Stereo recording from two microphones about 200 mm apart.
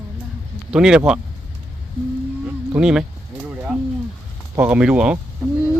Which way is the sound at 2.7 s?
5° right (ahead or behind).